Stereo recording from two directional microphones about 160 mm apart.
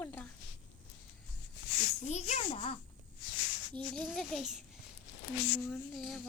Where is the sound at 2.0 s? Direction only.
45° left (ahead or behind).